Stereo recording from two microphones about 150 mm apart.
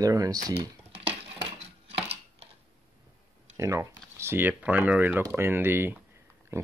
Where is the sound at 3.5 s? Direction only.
20° right (ahead or behind).